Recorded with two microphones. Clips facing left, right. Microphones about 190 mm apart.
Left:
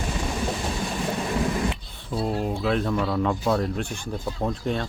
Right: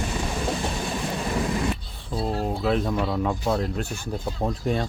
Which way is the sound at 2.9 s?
15° right (ahead or behind).